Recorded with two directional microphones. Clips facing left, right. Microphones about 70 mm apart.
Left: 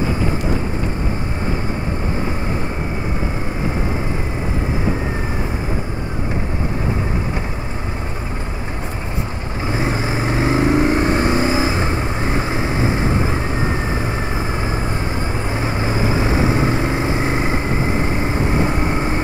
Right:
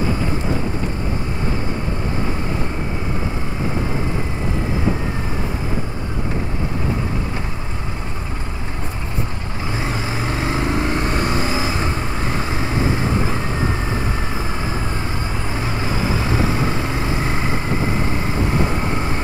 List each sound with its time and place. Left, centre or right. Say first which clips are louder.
9.7 s vehicle: left 4 dB; left
15.5 s vehicle: left 2 dB; left